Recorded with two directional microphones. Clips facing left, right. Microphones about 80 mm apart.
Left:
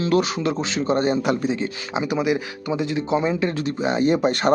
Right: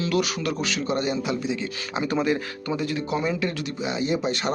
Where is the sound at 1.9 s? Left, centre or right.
Centre.